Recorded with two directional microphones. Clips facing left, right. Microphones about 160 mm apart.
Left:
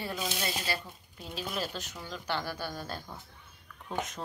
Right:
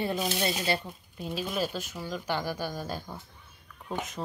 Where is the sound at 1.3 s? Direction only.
10° right (ahead or behind).